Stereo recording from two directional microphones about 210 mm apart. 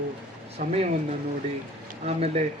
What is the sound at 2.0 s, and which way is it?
Speech, 30° right (ahead or behind).